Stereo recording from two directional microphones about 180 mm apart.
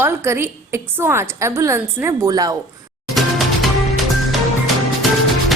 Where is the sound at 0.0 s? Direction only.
15° right (ahead or behind).